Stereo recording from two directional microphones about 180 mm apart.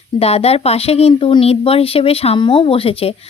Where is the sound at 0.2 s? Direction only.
35° left (ahead or behind).